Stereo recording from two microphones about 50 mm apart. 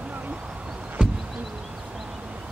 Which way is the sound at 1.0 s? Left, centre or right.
Centre.